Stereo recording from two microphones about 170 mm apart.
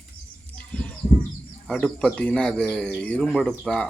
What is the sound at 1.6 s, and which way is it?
Speech, 5° left (ahead or behind).